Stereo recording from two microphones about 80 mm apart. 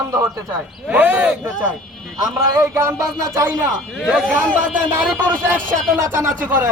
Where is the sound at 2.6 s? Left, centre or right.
Right.